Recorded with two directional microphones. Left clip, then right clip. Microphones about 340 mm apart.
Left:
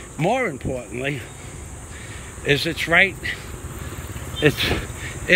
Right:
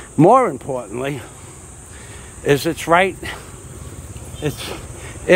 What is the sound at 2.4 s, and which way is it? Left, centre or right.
Speech, centre.